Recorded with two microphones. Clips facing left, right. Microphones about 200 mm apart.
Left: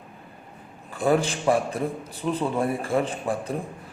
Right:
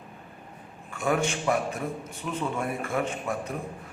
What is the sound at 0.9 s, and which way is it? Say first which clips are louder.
A man's voice: left 4 dB; 35° left (ahead or behind).